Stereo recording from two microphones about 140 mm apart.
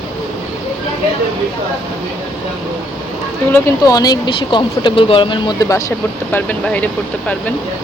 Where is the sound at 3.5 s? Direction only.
20° left (ahead or behind).